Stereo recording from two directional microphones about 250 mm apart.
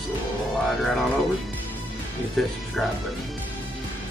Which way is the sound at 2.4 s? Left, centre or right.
Centre.